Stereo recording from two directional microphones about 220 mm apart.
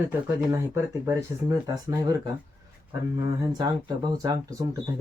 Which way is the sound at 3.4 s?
20° right (ahead or behind).